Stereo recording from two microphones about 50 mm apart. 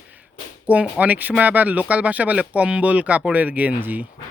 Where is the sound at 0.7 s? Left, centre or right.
Right.